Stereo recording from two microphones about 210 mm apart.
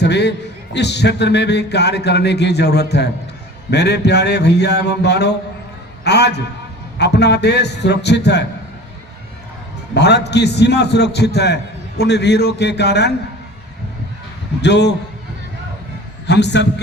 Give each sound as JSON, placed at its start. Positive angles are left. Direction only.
{"t": 0.0, "sound": "a man's voice", "side_deg": 55}
{"t": 9.9, "sound": "a man's voice", "side_deg": 55}
{"t": 14.6, "sound": "a man's voice", "side_deg": 55}
{"t": 16.2, "sound": "a man's voice", "side_deg": 55}